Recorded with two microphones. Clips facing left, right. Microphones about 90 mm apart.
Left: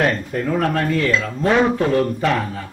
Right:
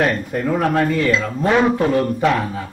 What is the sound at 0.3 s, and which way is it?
A man's voice, 15° right (ahead or behind).